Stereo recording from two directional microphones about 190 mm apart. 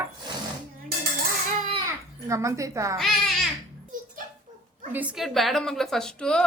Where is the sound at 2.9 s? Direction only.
Centre (ahead or behind).